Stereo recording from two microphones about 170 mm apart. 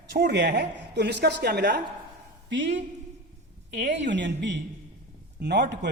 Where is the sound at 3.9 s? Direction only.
90° right.